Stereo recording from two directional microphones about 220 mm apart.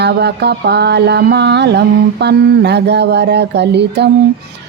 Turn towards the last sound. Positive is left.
turn(degrees=-50)  # may be behind; listen again after turning